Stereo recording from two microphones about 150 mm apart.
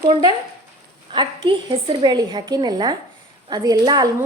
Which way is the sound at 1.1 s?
35° right (ahead or behind).